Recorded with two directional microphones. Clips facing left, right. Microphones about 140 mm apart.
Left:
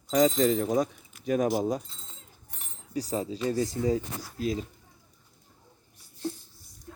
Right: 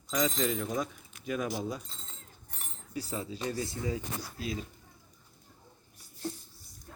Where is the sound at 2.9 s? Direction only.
40° left (ahead or behind).